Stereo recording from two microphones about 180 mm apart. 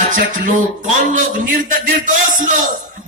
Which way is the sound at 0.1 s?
45° right (ahead or behind).